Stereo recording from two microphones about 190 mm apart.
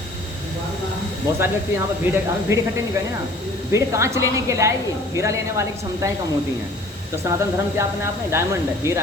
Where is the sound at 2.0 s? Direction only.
10° right (ahead or behind).